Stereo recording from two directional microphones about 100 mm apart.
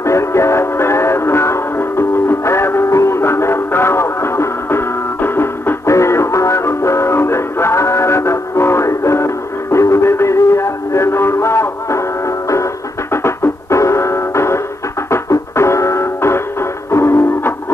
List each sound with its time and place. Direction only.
0.0 s music: 30° left (ahead or behind)
13.1 s music: 25° left (ahead or behind)